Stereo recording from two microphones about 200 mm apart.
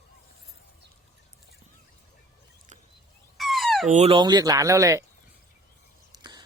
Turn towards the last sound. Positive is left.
turn(degrees=-20)  # may be behind; listen again after turning